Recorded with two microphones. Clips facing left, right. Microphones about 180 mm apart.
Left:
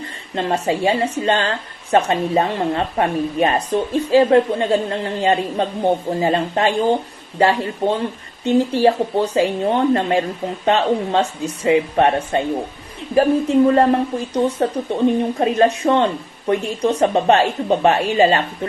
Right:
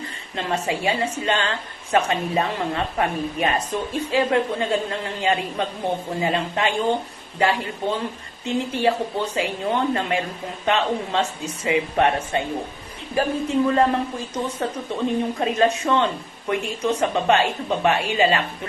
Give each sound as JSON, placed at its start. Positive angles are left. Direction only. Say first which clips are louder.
{"t": 0.3, "sound": "speech", "louder": "left 5 dB", "side_deg": 35}